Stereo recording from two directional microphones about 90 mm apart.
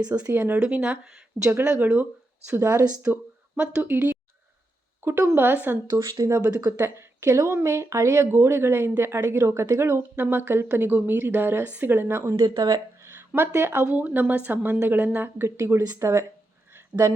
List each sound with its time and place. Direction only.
0.3 s a woman's voice: 20° right (ahead or behind)
5.9 s speech: 50° right (ahead or behind)
6.7 s a woman's voice: 35° right (ahead or behind)
12.4 s speech: 50° right (ahead or behind)
13.0 s a sound: 30° right (ahead or behind)
13.8 s a woman's voice: 15° right (ahead or behind); by 17.2 s 40° right (ahead or behind)